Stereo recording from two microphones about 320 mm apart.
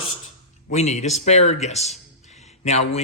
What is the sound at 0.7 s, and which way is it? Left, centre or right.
Speech, left.